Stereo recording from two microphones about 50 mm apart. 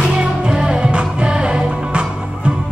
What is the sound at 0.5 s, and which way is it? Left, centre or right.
Music, centre.